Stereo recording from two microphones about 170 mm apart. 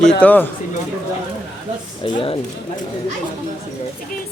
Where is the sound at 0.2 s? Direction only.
10° left (ahead or behind).